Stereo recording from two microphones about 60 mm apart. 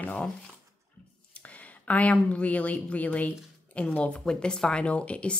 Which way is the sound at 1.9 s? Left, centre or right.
Left.